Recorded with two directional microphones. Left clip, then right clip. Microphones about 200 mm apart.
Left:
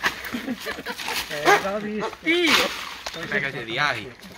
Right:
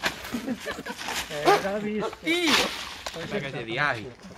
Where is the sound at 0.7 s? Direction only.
35° right (ahead or behind).